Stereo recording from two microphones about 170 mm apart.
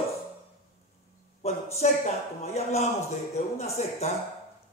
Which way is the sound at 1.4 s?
40° left (ahead or behind).